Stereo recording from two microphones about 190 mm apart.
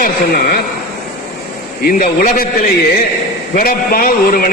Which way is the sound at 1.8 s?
50° left (ahead or behind).